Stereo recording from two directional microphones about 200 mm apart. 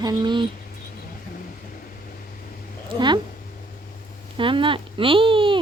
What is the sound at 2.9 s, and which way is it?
Speech, 20° right (ahead or behind).